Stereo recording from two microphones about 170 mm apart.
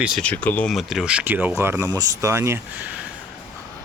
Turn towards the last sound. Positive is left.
turn(degrees=-10)  # may be behind; listen again after turning